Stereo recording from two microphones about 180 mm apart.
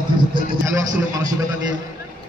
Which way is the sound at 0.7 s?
20° right (ahead or behind).